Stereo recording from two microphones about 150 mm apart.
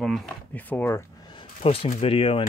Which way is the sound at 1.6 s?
40° left (ahead or behind).